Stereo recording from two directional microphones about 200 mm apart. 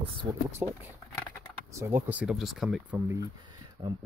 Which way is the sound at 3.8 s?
25° right (ahead or behind).